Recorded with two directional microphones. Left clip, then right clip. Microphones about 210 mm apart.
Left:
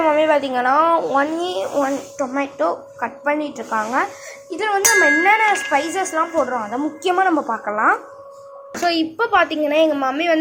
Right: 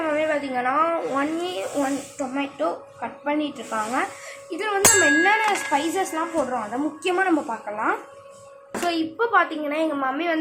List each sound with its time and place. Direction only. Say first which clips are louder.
0.0 s a woman's voice: left 8 dB; 20° left (ahead or behind)